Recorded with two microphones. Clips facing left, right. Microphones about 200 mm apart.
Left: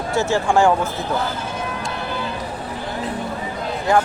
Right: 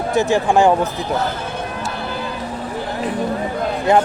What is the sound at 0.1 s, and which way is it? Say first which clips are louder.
Speech: right 3 dB; 15° right (ahead or behind).